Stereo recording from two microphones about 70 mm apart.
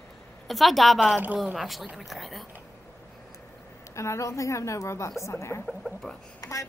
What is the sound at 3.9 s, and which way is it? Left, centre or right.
A woman's voice, left.